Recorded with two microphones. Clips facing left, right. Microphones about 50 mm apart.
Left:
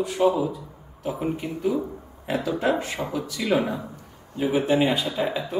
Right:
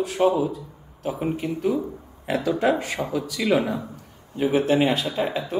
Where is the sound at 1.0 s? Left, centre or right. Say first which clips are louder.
Right 1 dB; centre.